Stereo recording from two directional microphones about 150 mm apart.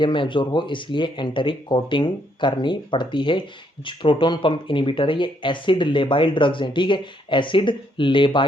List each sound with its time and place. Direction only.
0.0 s speech: 35° left (ahead or behind)